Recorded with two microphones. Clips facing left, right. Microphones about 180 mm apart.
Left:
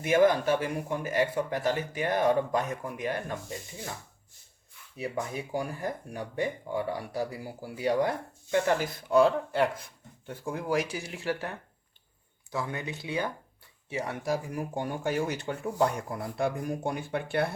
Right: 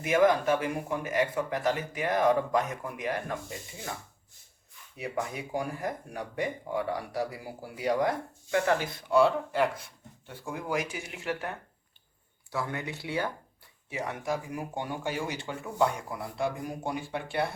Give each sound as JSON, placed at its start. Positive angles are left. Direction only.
{"t": 0.0, "sound": "speech", "side_deg": 35}
{"t": 4.9, "sound": "speech", "side_deg": 30}
{"t": 13.9, "sound": "speech", "side_deg": 30}